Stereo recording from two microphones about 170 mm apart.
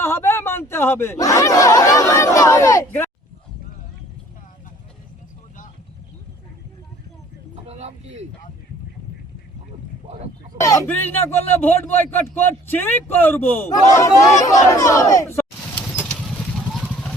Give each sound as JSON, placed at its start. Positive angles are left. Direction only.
{"t": 0.0, "sound": "speech", "side_deg": 15}
{"t": 7.7, "sound": "vehicle", "side_deg": -40}
{"t": 10.6, "sound": "a man's voice", "side_deg": 15}
{"t": 15.9, "sound": "a sound", "side_deg": 15}